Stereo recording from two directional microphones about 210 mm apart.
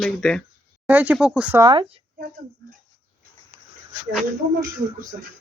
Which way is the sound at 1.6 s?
25° right (ahead or behind).